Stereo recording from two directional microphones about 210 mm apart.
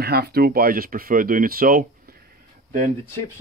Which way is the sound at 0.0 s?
50° right (ahead or behind).